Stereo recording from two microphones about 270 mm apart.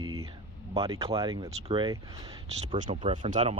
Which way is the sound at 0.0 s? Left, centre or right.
Right.